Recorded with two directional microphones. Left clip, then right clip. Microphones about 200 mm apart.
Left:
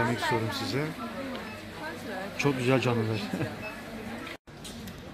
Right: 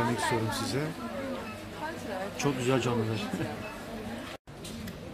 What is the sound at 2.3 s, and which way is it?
Speech, 20° left (ahead or behind).